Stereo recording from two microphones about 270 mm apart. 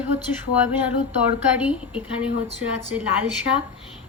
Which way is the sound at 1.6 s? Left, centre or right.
Centre.